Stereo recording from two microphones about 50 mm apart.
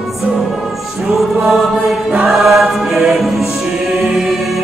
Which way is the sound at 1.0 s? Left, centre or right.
Centre.